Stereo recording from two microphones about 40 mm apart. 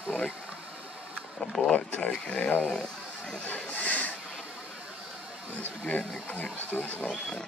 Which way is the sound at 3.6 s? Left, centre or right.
Left.